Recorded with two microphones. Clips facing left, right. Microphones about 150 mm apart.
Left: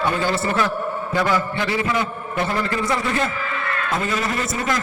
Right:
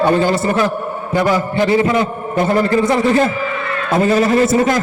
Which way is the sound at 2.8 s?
25° right (ahead or behind).